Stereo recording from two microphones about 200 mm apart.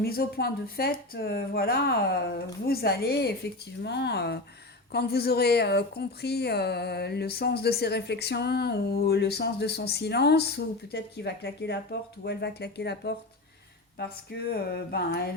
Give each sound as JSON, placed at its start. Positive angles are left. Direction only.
{"t": 0.0, "sound": "speech", "side_deg": 50}